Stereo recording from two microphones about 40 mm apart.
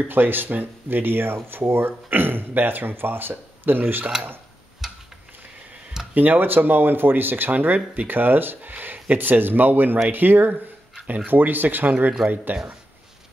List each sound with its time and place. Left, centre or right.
0.1 s speech: right
4.8 s a sound: centre
6.1 s speech: right
7.5 s speech: right